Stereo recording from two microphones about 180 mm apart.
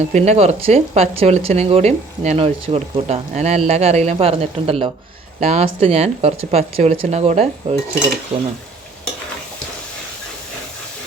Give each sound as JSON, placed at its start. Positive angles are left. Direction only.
{"t": 0.0, "sound": "speech", "side_deg": -40}